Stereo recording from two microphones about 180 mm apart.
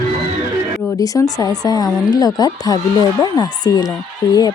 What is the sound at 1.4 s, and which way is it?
A woman's voice, 20° left (ahead or behind).